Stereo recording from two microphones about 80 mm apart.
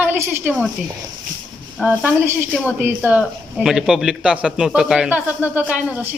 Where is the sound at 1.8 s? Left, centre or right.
Centre.